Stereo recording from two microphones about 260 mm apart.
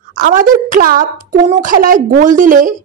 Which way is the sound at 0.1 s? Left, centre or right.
Right.